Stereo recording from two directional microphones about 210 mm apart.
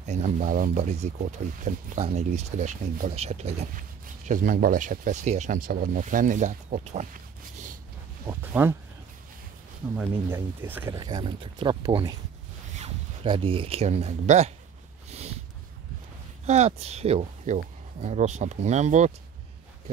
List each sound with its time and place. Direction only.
0.0 s speech: 35° right (ahead or behind)
8.3 s speech: 10° right (ahead or behind)
9.9 s speech: 10° right (ahead or behind)
11.0 s speech: 20° right (ahead or behind)
15.0 s a sound: 30° right (ahead or behind)
16.4 s speech: 30° right (ahead or behind)